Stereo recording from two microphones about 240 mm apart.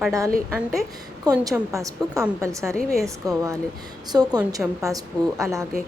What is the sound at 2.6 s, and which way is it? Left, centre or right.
Speech, centre.